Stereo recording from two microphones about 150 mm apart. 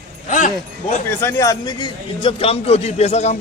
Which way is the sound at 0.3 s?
60° left (ahead or behind).